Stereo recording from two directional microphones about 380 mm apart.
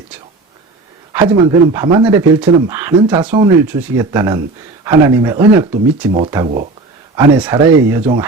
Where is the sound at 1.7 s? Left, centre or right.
Centre.